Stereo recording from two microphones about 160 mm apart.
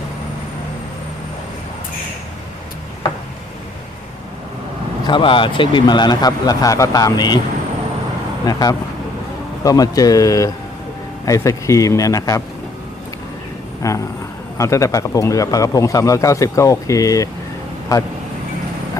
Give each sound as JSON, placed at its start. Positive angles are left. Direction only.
{"t": 5.0, "sound": "speech", "side_deg": 30}
{"t": 8.4, "sound": "speech", "side_deg": 25}
{"t": 13.8, "sound": "speech", "side_deg": 20}